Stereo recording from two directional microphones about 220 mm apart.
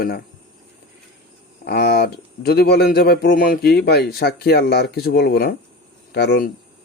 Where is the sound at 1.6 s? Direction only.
45° left (ahead or behind).